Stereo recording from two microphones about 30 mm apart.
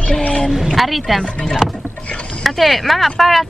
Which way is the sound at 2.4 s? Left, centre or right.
Centre.